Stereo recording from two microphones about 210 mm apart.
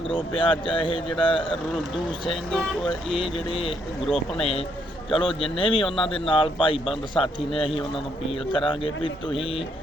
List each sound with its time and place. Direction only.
0.1 s a man's voice: 25° left (ahead or behind)
3.2 s a man's voice: 25° left (ahead or behind)